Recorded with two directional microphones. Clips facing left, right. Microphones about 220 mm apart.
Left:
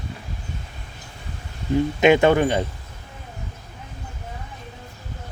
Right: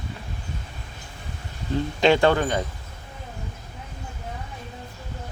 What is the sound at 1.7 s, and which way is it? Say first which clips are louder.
Speech: left 3 dB; 20° left (ahead or behind).